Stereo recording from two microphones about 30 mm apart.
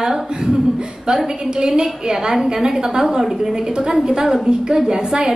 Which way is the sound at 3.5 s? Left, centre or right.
Right.